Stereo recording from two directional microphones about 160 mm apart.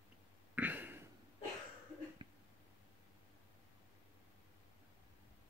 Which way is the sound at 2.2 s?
30° right (ahead or behind).